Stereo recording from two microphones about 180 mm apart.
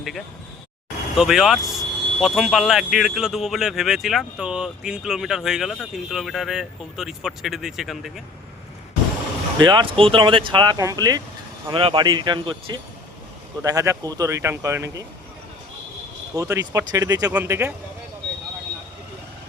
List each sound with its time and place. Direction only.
0.0 s speech: centre (ahead or behind)
9.6 s speech: 25° right (ahead or behind)
16.3 s speech: 20° right (ahead or behind)